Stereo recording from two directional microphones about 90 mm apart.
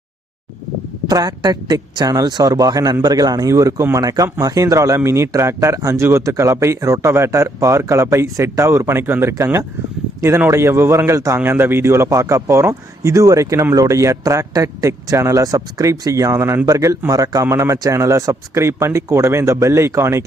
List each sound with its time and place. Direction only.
1.0 s a man's voice: 50° right (ahead or behind); by 20.2 s 30° right (ahead or behind)